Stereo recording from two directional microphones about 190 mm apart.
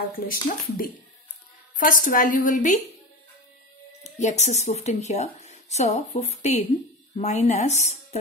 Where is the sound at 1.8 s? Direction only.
45° left (ahead or behind).